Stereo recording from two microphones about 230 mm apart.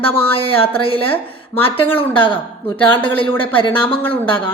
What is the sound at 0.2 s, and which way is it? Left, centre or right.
Speech, left.